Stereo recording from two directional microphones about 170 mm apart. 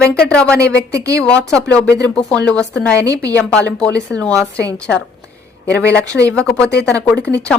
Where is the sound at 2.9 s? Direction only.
20° right (ahead or behind).